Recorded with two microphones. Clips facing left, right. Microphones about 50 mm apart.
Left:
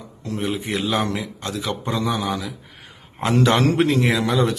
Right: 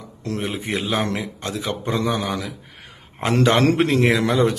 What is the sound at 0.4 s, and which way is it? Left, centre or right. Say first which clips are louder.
A man's voice: left 2 dB; right.